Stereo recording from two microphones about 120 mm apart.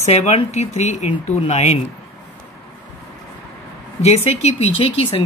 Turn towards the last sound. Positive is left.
turn(degrees=45)  # may be behind; listen again after turning